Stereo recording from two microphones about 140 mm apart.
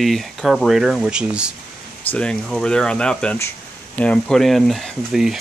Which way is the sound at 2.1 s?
10° left (ahead or behind).